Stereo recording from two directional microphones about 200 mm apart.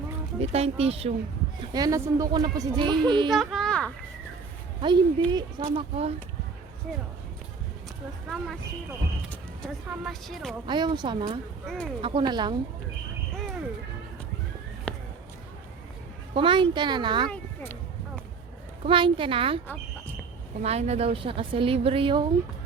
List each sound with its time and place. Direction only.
0.3 s speech: 30° right (ahead or behind)
1.7 s a woman's voice: 20° right (ahead or behind)
3.2 s speech: centre (ahead or behind)
4.8 s a woman's voice: 20° right (ahead or behind)
8.3 s speech: centre (ahead or behind)
10.7 s a woman's voice: 20° right (ahead or behind)
11.6 s speech: centre (ahead or behind)
12.0 s a woman's voice: 25° right (ahead or behind)
14.9 s a sound: 5° left (ahead or behind)
16.3 s a woman's voice: 25° right (ahead or behind)
17.2 s speech: 10° left (ahead or behind)
18.9 s a woman's voice: 25° right (ahead or behind)